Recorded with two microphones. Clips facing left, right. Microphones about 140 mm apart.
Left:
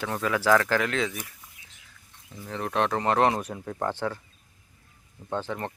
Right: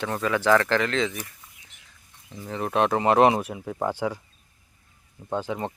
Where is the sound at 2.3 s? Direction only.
10° right (ahead or behind).